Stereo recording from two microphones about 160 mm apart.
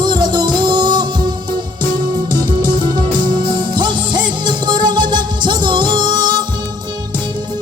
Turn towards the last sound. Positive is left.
turn(degrees=-30)  # may be behind; listen again after turning